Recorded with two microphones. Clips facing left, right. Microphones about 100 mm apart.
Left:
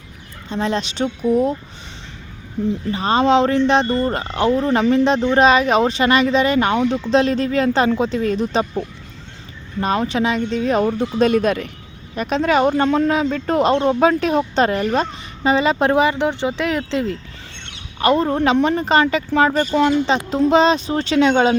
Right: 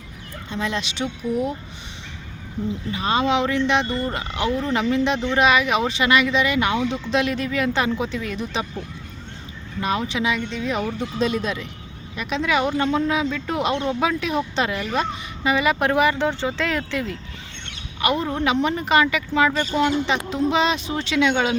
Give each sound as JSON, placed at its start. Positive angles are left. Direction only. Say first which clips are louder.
{"t": 0.5, "sound": "speech", "louder": "left 5 dB", "side_deg": 35}
{"t": 2.9, "sound": "speech", "louder": "left 6 dB", "side_deg": 35}
{"t": 9.8, "sound": "speech", "louder": "left 4 dB", "side_deg": 40}
{"t": 12.1, "sound": "speech", "louder": "left 5 dB", "side_deg": 45}
{"t": 15.4, "sound": "speech", "louder": "left 4 dB", "side_deg": 30}
{"t": 18.0, "sound": "speech", "louder": "left 6 dB", "side_deg": 35}